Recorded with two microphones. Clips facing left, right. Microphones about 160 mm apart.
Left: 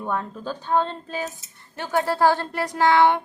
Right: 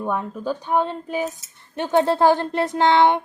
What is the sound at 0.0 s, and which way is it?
A woman's voice, 15° right (ahead or behind).